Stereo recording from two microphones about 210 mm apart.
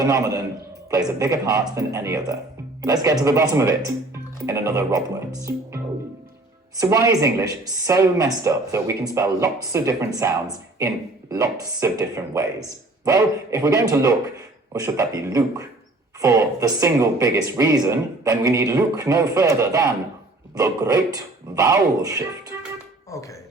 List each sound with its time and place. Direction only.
0.0 s speech: 15° right (ahead or behind)
23.0 s speech: 15° left (ahead or behind)